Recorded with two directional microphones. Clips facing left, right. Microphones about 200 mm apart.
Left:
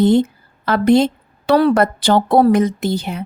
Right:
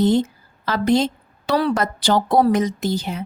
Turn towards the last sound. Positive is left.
turn(degrees=60)  # may be behind; listen again after turning